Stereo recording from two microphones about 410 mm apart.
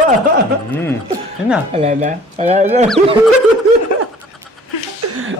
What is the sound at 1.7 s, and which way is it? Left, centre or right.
Speech, centre.